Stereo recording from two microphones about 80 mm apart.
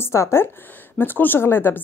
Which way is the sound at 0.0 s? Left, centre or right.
Left.